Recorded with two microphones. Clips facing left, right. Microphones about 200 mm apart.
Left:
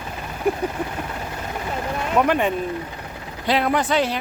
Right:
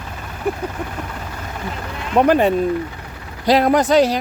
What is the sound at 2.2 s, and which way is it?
Speech, 35° right (ahead or behind).